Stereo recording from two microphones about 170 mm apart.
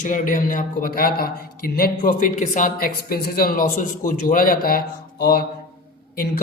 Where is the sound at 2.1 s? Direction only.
45° left (ahead or behind).